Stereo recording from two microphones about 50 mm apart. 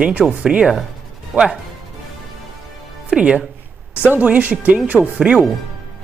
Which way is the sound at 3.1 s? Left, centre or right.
Right.